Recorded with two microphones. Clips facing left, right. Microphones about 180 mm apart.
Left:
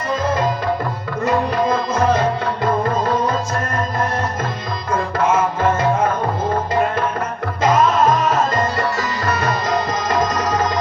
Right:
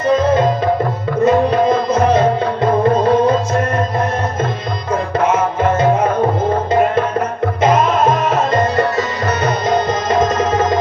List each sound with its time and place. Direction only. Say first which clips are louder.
0.2 s music: right 6 dB; 20° right (ahead or behind)
5.1 s music: right 2 dB; 25° right (ahead or behind)
7.6 s music: right 1 dB; 25° right (ahead or behind)